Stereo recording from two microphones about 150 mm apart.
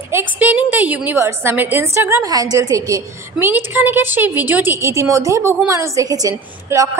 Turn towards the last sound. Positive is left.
turn(degrees=-20)  # may be behind; listen again after turning